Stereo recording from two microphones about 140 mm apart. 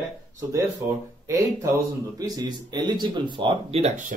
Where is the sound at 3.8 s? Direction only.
60° right (ahead or behind).